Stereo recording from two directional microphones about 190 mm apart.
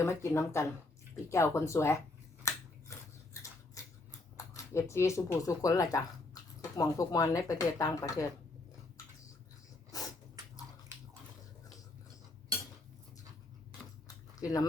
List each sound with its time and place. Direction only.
0.0 s speech: 15° left (ahead or behind)
2.4 s scissors: 15° left (ahead or behind)
4.5 s speech: 15° left (ahead or behind)
14.3 s speech: 20° left (ahead or behind)